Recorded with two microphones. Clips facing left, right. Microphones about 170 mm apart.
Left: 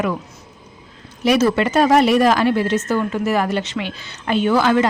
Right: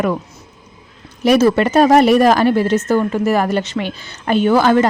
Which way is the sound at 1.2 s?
45° right (ahead or behind).